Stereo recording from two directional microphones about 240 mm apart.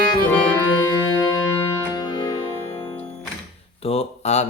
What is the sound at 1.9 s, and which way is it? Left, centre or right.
Music, centre.